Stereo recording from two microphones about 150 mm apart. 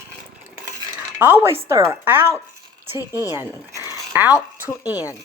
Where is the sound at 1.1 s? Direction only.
15° right (ahead or behind).